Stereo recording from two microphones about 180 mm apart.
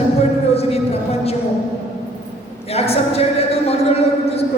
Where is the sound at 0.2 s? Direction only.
35° left (ahead or behind).